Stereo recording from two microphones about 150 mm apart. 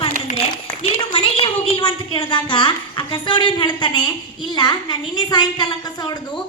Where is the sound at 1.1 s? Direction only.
40° left (ahead or behind).